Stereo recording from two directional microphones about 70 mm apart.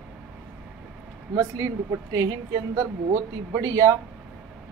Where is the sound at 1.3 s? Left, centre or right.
Right.